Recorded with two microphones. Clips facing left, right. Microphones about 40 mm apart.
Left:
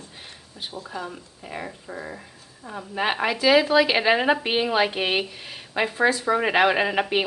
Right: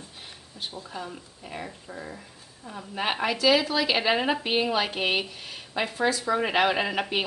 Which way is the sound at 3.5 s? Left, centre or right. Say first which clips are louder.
Left 5 dB; left.